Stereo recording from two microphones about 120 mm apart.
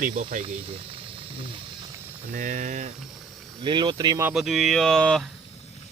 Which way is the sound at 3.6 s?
40° right (ahead or behind).